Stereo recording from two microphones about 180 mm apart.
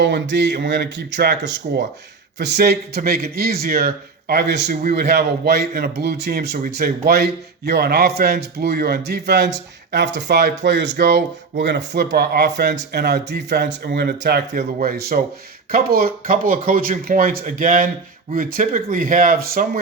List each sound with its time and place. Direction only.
0.0 s speech: 75° right (ahead or behind)
10.7 s speech: 80° right; by 19.8 s 55° right (ahead or behind)